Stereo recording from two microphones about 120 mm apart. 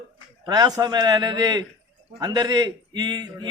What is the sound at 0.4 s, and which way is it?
A man's voice, 30° right (ahead or behind).